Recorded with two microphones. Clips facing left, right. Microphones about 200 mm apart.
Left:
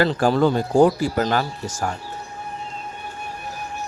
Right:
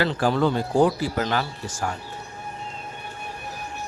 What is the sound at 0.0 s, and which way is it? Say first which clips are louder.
Speech: left 4 dB; 45° left (ahead or behind).